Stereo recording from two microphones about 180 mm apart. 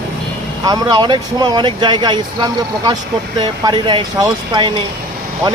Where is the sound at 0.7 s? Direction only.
25° right (ahead or behind).